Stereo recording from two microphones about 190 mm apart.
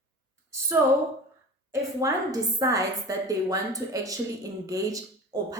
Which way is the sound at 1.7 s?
20° right (ahead or behind).